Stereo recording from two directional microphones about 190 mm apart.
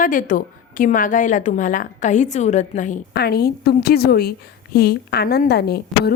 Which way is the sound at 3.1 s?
55° left (ahead or behind).